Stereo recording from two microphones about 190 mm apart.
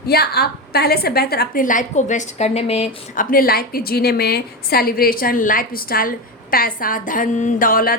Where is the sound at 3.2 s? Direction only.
50° left (ahead or behind).